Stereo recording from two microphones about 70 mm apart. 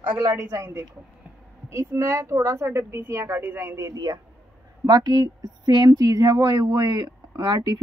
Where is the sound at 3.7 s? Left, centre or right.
Right.